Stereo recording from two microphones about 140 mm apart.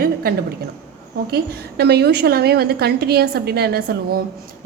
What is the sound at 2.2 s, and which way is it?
A woman's voice, 90° right.